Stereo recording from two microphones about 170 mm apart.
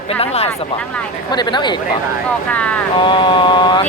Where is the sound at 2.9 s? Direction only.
30° left (ahead or behind).